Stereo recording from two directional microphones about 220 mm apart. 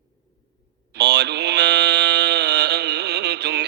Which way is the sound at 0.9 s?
50° right (ahead or behind).